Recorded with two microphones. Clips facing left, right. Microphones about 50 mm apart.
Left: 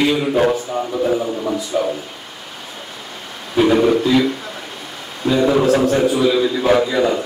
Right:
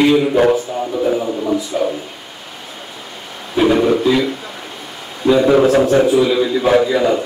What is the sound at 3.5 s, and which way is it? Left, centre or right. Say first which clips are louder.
Speech: even; centre.